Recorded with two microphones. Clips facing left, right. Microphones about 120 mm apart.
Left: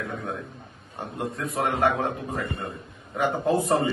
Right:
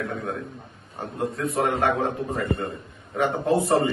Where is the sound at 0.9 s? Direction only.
Centre (ahead or behind).